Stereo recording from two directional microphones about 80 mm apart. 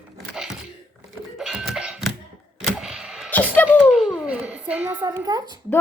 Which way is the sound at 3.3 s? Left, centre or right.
Left.